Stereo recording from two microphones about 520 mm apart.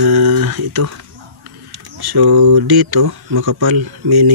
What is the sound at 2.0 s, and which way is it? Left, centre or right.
Speech, right.